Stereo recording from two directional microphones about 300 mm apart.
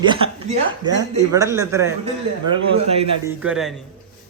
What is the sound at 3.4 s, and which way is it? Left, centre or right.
Speech, centre.